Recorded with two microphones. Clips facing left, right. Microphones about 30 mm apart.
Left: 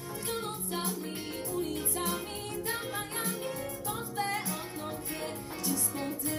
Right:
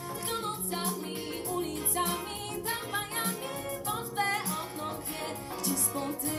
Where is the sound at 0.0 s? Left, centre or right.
Right.